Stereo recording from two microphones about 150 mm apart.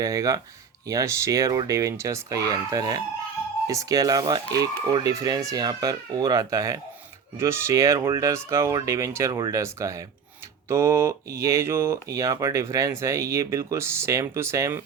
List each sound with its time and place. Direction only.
0.0 s speech: 20° right (ahead or behind)